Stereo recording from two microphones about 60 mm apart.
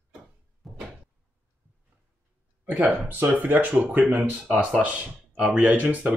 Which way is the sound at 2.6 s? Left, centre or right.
Right.